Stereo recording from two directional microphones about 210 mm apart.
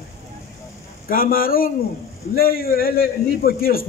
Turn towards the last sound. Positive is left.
turn(degrees=45)  # may be behind; listen again after turning